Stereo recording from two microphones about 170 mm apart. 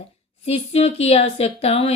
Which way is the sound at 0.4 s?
40° left (ahead or behind).